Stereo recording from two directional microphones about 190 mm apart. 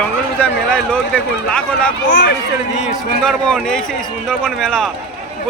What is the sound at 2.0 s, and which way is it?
Speech, 75° left (ahead or behind).